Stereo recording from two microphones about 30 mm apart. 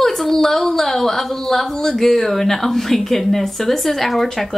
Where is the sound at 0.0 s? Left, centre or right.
Centre.